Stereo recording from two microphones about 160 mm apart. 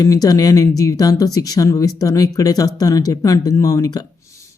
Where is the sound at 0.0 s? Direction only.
20° left (ahead or behind).